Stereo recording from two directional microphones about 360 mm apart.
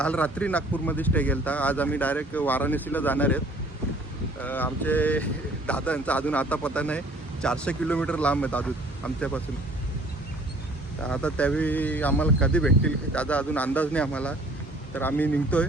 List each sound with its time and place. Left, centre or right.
0.0 s a man's voice: centre
4.4 s a man's voice: centre
11.0 s a man's voice: centre